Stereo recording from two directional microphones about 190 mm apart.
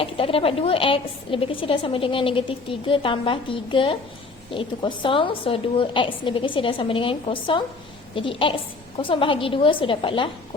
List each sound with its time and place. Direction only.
0.0 s a woman's voice: 30° left (ahead or behind)